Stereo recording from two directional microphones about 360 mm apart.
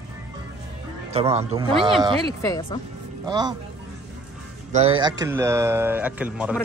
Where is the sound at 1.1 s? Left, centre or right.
Centre.